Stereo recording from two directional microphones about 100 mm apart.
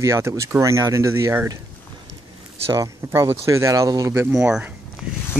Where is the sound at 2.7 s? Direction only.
35° right (ahead or behind).